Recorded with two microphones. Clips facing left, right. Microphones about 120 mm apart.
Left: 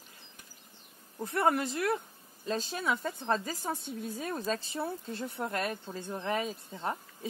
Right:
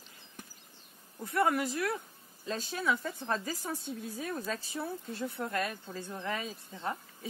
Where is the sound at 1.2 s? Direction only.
25° left (ahead or behind).